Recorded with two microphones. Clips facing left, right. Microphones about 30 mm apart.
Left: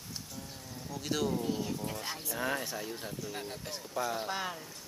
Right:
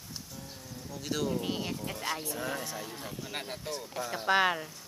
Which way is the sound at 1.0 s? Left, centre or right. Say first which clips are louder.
Even; centre.